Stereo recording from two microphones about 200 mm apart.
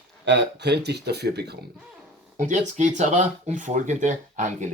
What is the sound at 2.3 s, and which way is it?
Speech, 40° right (ahead or behind).